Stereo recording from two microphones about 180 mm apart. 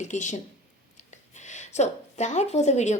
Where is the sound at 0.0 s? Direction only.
40° left (ahead or behind).